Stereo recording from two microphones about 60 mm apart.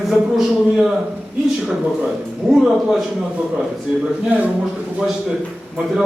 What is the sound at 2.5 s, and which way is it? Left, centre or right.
Speech, centre.